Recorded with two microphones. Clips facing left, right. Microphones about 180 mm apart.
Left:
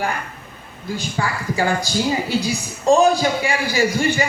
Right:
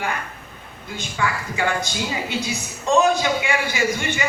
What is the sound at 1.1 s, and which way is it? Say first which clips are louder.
A man's voice: even; 35° left (ahead or behind).